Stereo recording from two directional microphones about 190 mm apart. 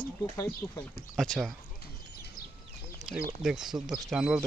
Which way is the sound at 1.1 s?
Centre (ahead or behind).